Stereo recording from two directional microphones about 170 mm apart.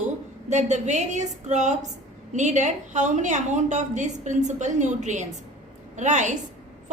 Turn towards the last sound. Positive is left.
turn(degrees=-45)  # may be behind; listen again after turning